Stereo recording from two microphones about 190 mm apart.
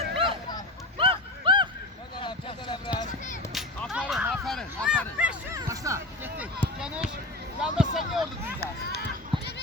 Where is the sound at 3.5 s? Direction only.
Centre (ahead or behind).